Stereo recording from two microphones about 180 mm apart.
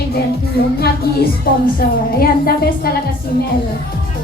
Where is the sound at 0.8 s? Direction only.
60° left (ahead or behind).